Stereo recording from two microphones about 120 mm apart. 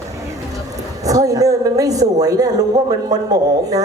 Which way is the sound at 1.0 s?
30° right (ahead or behind).